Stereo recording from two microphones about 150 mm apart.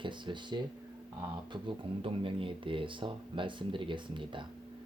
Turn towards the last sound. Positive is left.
turn(degrees=-35)  # may be behind; listen again after turning